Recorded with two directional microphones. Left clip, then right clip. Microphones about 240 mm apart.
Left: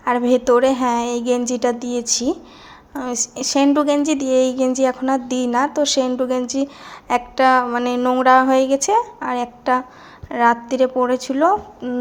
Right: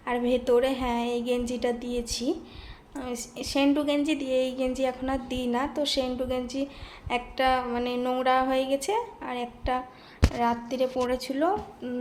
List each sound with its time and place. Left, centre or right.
0.0 s a woman's voice: left